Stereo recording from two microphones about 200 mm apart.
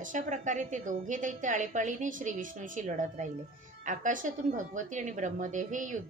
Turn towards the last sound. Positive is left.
turn(degrees=-40)  # may be behind; listen again after turning